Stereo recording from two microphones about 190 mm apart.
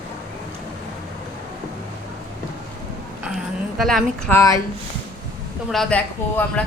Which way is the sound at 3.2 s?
Centre (ahead or behind).